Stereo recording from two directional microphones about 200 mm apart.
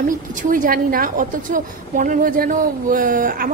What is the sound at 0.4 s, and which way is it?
A woman's voice, 40° right (ahead or behind).